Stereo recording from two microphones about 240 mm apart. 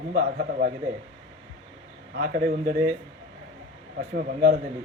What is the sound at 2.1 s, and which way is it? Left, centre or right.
Speech, right.